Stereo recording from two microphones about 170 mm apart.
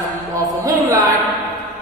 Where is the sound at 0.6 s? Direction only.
20° right (ahead or behind).